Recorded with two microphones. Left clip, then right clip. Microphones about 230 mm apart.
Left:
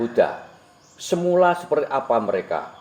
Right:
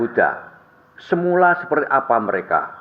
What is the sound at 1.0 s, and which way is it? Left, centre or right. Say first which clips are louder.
Speech: right 2 dB; right.